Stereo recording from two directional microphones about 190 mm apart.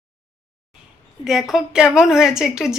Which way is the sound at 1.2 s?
Centre (ahead or behind).